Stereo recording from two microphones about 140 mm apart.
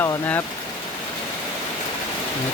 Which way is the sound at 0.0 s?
15° left (ahead or behind).